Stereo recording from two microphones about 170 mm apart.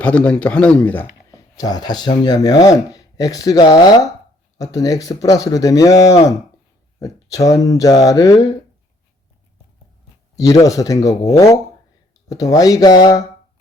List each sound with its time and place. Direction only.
0.0 s a man's voice: 5° left (ahead or behind)
1.3 s speech: 20° left (ahead or behind)
10.3 s speech: 20° left (ahead or behind)